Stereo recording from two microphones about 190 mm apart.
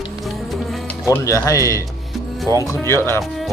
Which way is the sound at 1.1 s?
15° left (ahead or behind).